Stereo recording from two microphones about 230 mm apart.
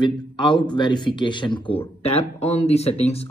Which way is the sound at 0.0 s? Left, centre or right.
Centre.